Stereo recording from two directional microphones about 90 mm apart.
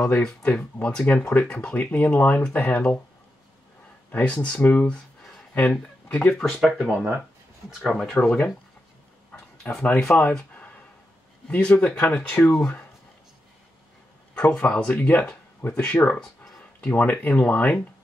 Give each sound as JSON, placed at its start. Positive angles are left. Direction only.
{"t": 0.1, "sound": "speech", "side_deg": 5}
{"t": 0.4, "sound": "speech", "side_deg": 20}
{"t": 4.1, "sound": "speech", "side_deg": 15}
{"t": 8.2, "sound": "speech", "side_deg": 15}
{"t": 9.6, "sound": "speech", "side_deg": 20}
{"t": 11.4, "sound": "speech", "side_deg": 10}
{"t": 14.3, "sound": "speech", "side_deg": 10}
{"t": 16.2, "sound": "a sound", "side_deg": 5}
{"t": 16.9, "sound": "speech", "side_deg": 20}